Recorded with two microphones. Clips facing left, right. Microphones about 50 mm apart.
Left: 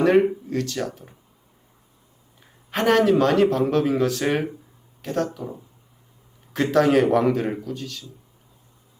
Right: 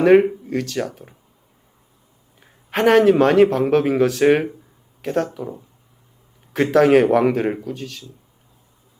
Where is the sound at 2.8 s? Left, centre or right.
Centre.